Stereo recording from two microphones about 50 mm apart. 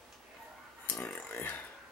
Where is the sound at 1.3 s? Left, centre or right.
Left.